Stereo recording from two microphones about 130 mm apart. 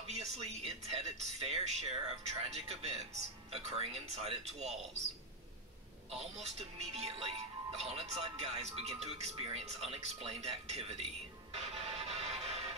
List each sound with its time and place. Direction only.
0.0 s speech: 55° right (ahead or behind)
6.0 s speech: 55° right (ahead or behind)
11.5 s music: 50° right (ahead or behind)